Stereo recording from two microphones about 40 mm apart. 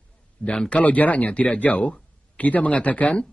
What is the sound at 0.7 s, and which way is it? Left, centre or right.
Speech, left.